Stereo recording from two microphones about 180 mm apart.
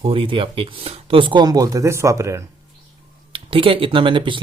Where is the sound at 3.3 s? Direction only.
30° right (ahead or behind).